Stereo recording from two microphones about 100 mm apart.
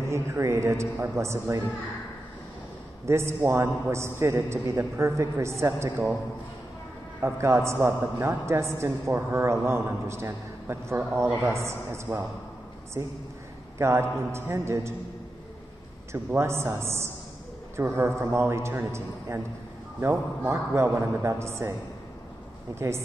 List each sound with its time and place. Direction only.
0.0 s a man's voice: 30° right (ahead or behind)
3.1 s a man's voice: 25° right (ahead or behind)
7.2 s a man's voice: 25° right (ahead or behind)
16.1 s a man's voice: 25° right (ahead or behind)
22.8 s a man's voice: 25° right (ahead or behind)